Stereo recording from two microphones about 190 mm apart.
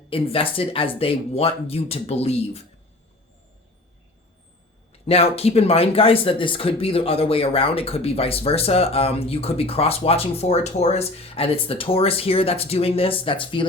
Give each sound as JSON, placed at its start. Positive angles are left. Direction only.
{"t": 0.1, "sound": "speech", "side_deg": 30}
{"t": 4.9, "sound": "speech", "side_deg": 30}